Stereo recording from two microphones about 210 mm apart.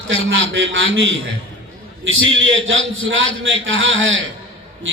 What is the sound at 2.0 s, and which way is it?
A man's voice, 65° right (ahead or behind).